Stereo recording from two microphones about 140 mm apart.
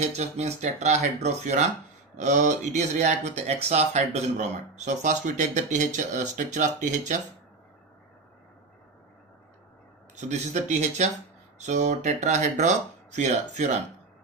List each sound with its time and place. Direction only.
0.0 s speech: 55° right (ahead or behind)
10.2 s speech: 55° right (ahead or behind)